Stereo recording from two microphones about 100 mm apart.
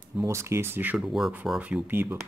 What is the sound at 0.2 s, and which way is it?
Speech, 30° right (ahead or behind).